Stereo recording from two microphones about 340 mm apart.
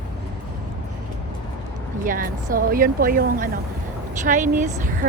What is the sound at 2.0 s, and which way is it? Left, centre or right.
A woman's voice, right.